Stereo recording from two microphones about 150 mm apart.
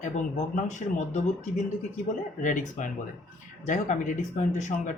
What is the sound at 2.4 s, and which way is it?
Speech, 55° left (ahead or behind).